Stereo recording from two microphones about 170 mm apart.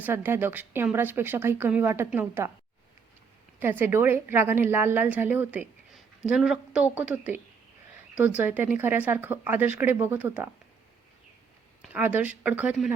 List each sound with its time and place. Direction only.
0.0 s a woman's voice: 15° right (ahead or behind)
3.6 s a woman's voice: 10° right (ahead or behind)
11.8 s a woman's voice: 10° right (ahead or behind)